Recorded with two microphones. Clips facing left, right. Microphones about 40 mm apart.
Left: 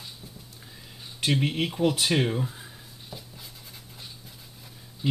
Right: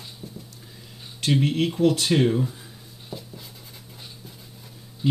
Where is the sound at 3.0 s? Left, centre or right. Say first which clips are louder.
Right 6 dB; centre.